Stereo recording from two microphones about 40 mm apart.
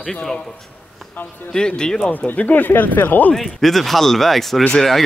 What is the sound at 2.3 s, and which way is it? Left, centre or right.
Speech, left.